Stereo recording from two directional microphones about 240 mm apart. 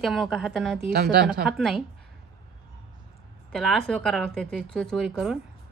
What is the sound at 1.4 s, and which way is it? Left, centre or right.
Speech, centre.